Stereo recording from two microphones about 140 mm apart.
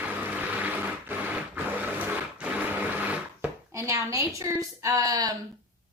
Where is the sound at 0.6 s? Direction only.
15° right (ahead or behind).